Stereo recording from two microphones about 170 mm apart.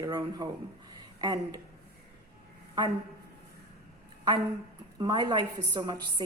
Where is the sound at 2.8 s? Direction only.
25° right (ahead or behind).